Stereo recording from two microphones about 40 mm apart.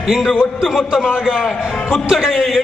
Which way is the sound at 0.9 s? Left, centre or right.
Centre.